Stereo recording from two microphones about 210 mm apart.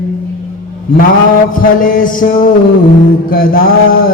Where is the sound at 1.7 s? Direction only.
40° left (ahead or behind).